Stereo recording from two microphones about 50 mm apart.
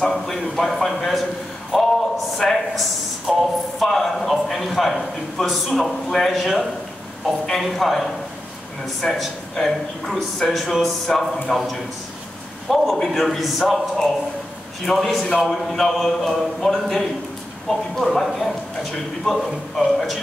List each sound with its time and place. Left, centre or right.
0.3 s a man's voice: centre
9.0 s a man's voice: centre